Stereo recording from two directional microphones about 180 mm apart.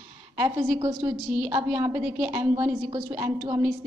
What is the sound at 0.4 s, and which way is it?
A woman's voice, 15° right (ahead or behind).